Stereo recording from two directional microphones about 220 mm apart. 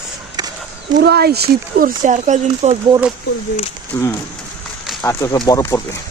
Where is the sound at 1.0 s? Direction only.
45° right (ahead or behind).